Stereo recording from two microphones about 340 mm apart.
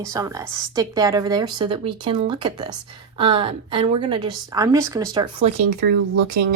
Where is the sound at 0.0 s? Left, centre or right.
Centre.